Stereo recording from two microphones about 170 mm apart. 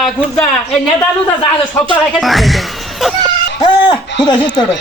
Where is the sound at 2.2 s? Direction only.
Centre (ahead or behind).